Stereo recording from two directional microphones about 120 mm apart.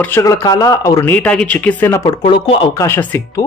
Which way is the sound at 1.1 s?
10° left (ahead or behind).